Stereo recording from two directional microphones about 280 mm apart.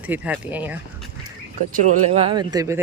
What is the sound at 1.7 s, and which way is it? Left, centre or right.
Speech, right.